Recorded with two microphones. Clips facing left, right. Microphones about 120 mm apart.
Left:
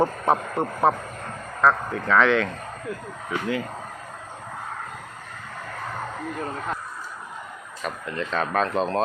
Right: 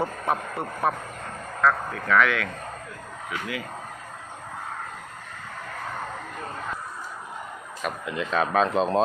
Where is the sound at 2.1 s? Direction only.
25° left (ahead or behind).